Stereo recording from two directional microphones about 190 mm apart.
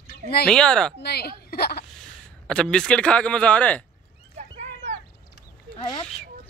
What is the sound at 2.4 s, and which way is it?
Speech, 5° left (ahead or behind).